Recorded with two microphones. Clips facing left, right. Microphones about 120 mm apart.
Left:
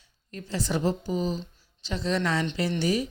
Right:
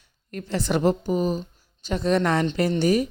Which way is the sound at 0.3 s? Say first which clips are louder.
Right 5 dB; 60° right (ahead or behind).